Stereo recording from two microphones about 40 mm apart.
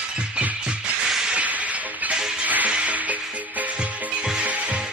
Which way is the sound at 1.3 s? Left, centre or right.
Right.